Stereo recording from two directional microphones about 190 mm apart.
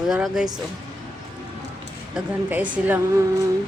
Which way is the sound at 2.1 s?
10° right (ahead or behind).